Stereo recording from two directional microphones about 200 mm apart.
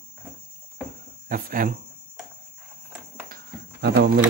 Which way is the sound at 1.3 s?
45° right (ahead or behind).